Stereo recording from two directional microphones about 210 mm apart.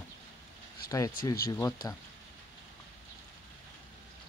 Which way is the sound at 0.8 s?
45° left (ahead or behind).